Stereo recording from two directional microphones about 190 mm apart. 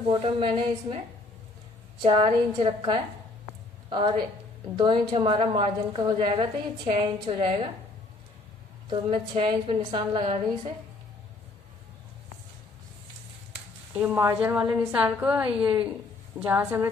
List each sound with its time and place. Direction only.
0.1 s a woman's voice: 30° right (ahead or behind)
4.7 s a woman's voice: 25° right (ahead or behind)
8.9 s a woman's voice: 30° right (ahead or behind)
13.9 s a woman's voice: 10° right (ahead or behind)